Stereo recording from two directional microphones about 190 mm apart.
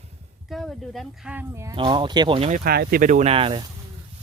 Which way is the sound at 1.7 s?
25° right (ahead or behind).